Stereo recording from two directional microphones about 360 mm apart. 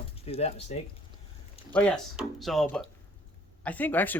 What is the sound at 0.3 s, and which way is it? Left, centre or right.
Speech, centre.